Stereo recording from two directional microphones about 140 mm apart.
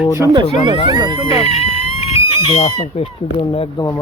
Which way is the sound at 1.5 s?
45° left (ahead or behind).